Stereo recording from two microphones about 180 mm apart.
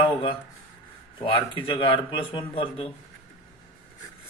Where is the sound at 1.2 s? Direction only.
25° left (ahead or behind).